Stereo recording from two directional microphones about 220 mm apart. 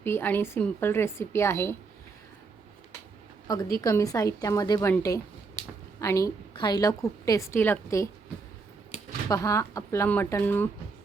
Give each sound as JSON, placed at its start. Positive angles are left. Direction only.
{"t": 0.0, "sound": "a woman's voice", "side_deg": 10}
{"t": 3.4, "sound": "a woman's voice", "side_deg": 15}
{"t": 9.3, "sound": "a woman's voice", "side_deg": 15}